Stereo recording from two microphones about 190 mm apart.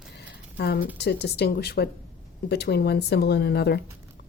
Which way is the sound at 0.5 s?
60° left (ahead or behind).